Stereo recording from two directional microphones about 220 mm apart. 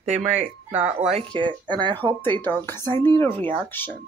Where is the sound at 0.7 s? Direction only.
30° right (ahead or behind).